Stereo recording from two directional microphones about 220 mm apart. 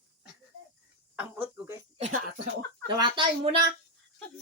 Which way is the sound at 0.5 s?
75° left (ahead or behind).